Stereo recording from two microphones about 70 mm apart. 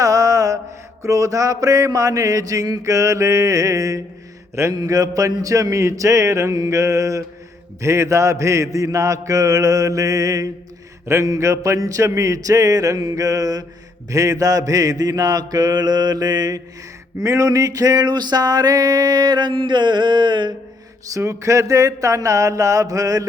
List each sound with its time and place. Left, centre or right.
0.0 s mantra: right
11.0 s mantra: right
17.2 s music: right
21.1 s mantra: right